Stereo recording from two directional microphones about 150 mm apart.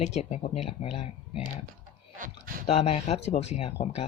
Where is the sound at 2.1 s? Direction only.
65° right (ahead or behind).